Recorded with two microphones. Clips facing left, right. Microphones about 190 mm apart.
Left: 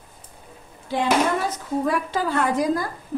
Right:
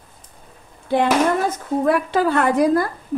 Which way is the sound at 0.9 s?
55° right (ahead or behind).